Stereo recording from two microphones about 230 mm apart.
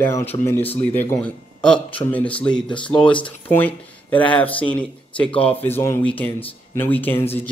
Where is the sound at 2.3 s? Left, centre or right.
Left.